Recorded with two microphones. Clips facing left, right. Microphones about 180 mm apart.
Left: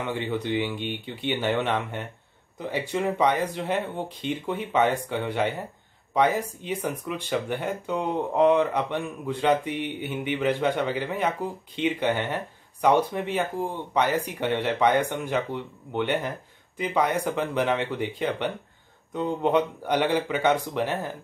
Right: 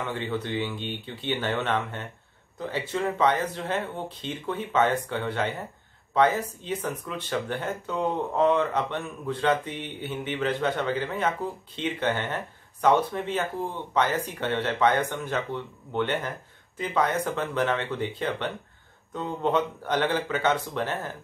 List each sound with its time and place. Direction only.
0.0 s speech: 15° left (ahead or behind)